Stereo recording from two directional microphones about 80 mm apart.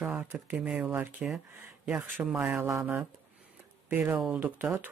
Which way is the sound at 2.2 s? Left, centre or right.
Right.